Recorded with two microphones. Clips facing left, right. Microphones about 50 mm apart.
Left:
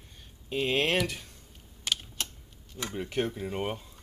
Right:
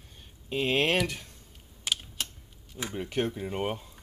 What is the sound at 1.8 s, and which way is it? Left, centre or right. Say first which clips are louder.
Typing: even; centre.